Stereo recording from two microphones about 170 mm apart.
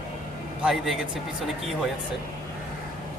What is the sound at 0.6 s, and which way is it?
Speech, centre (ahead or behind).